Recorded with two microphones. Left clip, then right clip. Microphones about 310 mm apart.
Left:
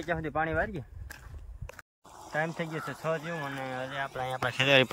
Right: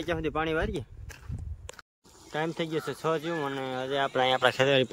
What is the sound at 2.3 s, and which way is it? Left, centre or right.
Speech, centre.